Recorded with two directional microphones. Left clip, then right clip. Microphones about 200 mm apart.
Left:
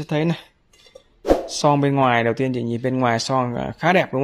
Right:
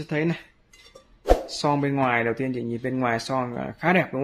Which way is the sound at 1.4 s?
40° left (ahead or behind).